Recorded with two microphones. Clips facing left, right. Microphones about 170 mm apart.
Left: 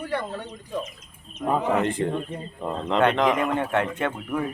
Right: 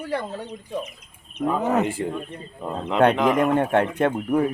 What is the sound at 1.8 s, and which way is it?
Speech, 5° right (ahead or behind).